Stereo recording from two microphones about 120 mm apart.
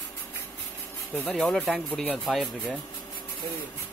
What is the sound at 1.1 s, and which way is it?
Speech, 10° left (ahead or behind).